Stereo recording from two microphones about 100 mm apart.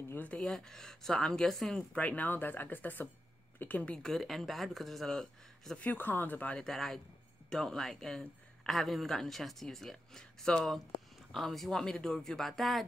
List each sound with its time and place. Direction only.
0.1 s speech: 15° left (ahead or behind)
5.9 s speech: 20° left (ahead or behind); by 12.8 s centre (ahead or behind)